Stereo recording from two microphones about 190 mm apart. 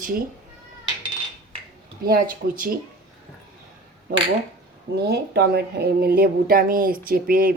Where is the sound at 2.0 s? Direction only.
50° right (ahead or behind).